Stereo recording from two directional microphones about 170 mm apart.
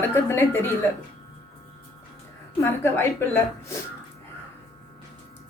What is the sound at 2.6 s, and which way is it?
A woman's voice, 15° left (ahead or behind).